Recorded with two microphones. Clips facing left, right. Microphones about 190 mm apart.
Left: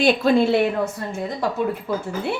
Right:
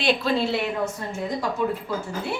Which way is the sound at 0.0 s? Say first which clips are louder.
Left 6 dB; 50° left (ahead or behind).